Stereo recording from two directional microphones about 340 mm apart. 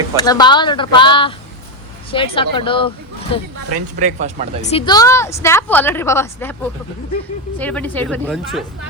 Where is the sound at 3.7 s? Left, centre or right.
Right.